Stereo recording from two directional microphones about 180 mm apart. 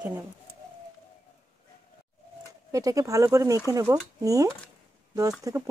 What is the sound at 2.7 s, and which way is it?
Speech, 20° right (ahead or behind).